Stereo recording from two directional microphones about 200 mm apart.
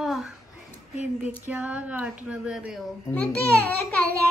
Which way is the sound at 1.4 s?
10° right (ahead or behind).